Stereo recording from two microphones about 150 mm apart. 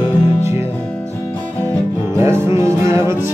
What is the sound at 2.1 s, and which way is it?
Music, 15° right (ahead or behind).